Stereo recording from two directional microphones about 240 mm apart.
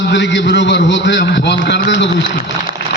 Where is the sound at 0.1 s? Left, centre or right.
Left.